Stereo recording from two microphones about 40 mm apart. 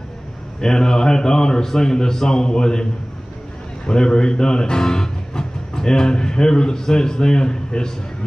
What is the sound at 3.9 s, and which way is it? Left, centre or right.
Speech, centre.